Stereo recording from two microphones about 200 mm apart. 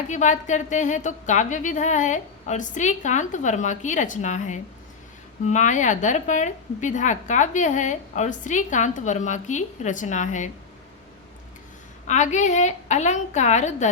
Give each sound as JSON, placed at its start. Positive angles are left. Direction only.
{"t": 0.1, "sound": "a woman's voice", "side_deg": 35}
{"t": 12.0, "sound": "a woman's voice", "side_deg": 35}